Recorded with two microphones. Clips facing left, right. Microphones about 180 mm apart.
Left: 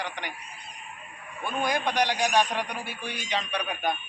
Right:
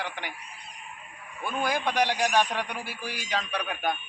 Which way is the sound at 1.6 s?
5° right (ahead or behind).